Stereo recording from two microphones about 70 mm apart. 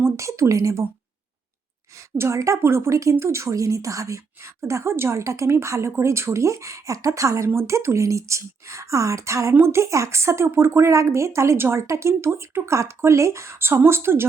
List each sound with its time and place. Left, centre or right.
0.0 s speech: right
2.0 s speech: right